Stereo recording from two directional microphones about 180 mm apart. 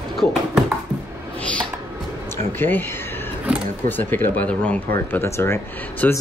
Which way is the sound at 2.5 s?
10° left (ahead or behind).